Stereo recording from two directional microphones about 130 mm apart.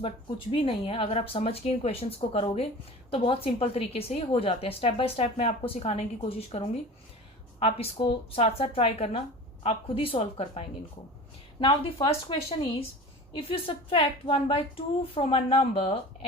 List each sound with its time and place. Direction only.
0.5 s a woman's voice: 45° left (ahead or behind)
7.6 s a woman's voice: 50° left (ahead or behind)